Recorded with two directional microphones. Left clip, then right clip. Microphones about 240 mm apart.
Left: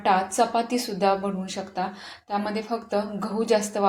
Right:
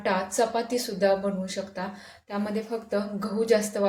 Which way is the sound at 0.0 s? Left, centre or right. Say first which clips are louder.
Left 4 dB; centre.